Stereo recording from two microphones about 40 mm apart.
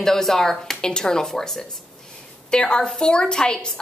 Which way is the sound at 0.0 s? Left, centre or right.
Centre.